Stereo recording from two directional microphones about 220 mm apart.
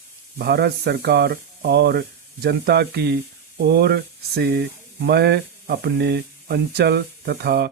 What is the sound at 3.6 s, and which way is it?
Sizzle, 45° right (ahead or behind).